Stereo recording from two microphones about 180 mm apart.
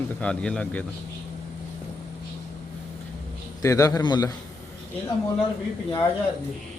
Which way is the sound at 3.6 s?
20° left (ahead or behind).